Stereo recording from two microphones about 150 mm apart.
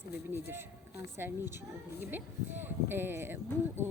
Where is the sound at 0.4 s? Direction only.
15° right (ahead or behind).